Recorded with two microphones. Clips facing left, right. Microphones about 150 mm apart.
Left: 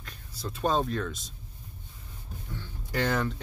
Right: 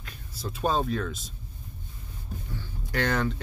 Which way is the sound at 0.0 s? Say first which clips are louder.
Right 1 dB; 5° right (ahead or behind).